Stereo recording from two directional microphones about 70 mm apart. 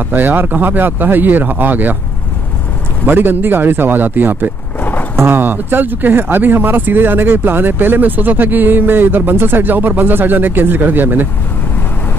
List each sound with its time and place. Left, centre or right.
0.1 s speech: right
3.1 s speech: right